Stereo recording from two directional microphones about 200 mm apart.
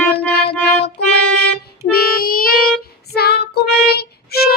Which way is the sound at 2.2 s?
45° left (ahead or behind).